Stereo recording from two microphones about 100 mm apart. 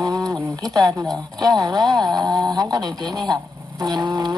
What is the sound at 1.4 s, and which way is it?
Speech, 40° right (ahead or behind).